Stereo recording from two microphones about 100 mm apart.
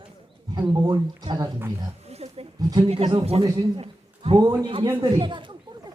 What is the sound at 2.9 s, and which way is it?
Speech, 80° right.